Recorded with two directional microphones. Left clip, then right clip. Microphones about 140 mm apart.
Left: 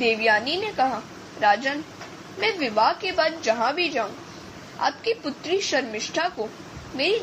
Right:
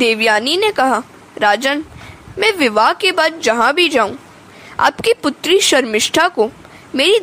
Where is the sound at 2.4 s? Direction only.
85° right.